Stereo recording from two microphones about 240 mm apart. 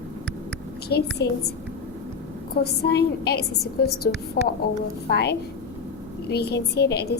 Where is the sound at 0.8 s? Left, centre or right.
Left.